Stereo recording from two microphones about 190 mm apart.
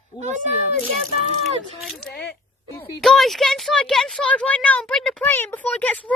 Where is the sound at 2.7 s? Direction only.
5° left (ahead or behind).